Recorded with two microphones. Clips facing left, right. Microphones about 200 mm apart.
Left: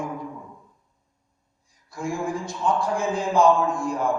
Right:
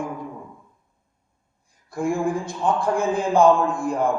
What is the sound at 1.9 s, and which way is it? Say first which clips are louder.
A man's voice: right 5 dB; 55° right (ahead or behind).